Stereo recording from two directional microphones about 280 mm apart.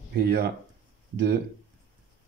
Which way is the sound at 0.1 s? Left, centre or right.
Right.